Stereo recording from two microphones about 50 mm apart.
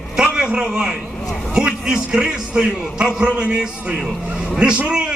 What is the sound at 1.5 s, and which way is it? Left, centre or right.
A man's voice, centre.